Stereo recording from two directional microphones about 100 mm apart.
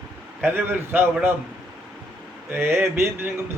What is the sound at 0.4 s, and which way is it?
Speech, 20° right (ahead or behind).